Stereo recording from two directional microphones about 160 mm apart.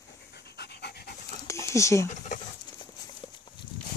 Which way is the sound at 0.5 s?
90° left.